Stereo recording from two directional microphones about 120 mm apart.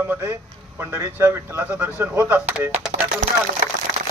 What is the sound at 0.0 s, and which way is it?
A man's voice, 20° right (ahead or behind).